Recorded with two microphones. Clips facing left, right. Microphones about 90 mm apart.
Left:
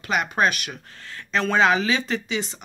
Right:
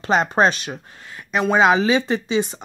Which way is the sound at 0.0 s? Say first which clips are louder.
Right 5 dB; 30° right (ahead or behind).